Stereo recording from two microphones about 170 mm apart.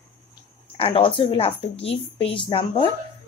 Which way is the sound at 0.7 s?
35° left (ahead or behind).